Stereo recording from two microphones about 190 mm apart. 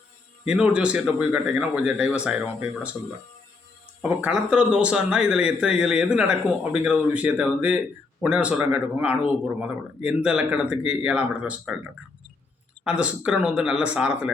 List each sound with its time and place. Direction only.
0.4 s speech: 5° right (ahead or behind)
4.0 s speech: 5° right (ahead or behind)
12.8 s speech: 5° right (ahead or behind)